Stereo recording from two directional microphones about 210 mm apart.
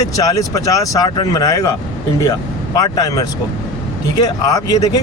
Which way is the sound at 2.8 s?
15° left (ahead or behind).